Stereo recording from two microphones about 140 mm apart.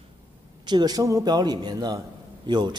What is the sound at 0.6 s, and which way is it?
A man's voice, 30° right (ahead or behind).